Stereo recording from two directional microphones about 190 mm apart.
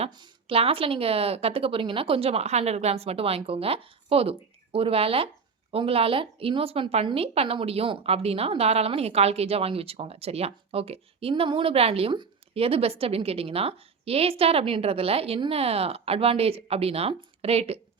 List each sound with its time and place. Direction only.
0.0 s a woman's voice: 30° right (ahead or behind)